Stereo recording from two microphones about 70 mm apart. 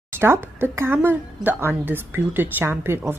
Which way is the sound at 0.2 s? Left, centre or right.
Right.